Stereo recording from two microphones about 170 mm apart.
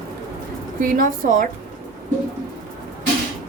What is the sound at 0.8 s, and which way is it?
Speech, 50° right (ahead or behind).